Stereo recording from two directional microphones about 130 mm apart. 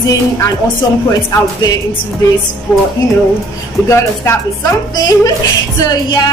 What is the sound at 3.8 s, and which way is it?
Speech, 20° left (ahead or behind).